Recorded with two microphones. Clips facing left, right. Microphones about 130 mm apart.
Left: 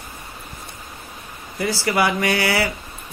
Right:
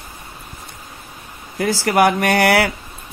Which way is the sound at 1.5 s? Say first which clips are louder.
Right 5 dB; 50° right (ahead or behind).